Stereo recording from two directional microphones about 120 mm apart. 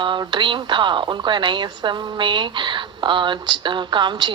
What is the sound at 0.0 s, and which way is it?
A woman's voice, 40° right (ahead or behind).